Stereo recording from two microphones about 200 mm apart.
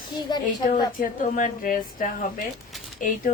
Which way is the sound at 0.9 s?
40° left (ahead or behind).